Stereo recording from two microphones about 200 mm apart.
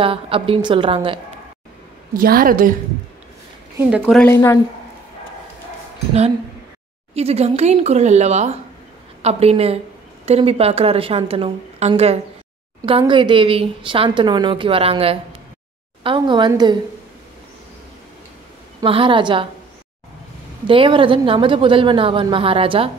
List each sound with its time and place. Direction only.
0.0 s a woman's voice: 25° right (ahead or behind)
2.1 s a woman's voice: 45° right (ahead or behind)
3.7 s a woman's voice: 10° right (ahead or behind)
4.0 s a woman's voice: 5° left (ahead or behind)
7.2 s a woman's voice: 30° right (ahead or behind)
18.8 s a woman's voice: 25° right (ahead or behind)
20.6 s a woman's voice: 25° right (ahead or behind)